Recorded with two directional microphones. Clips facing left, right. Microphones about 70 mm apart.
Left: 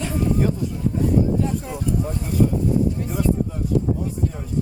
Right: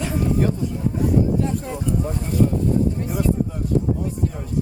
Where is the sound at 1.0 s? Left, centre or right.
Centre.